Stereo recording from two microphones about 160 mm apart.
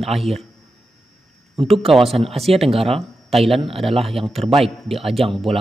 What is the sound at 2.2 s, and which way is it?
Speech, 40° right (ahead or behind).